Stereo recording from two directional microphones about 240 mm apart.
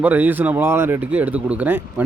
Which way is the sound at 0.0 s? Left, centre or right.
Centre.